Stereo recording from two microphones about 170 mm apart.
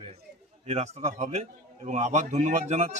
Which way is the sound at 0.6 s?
40° right (ahead or behind).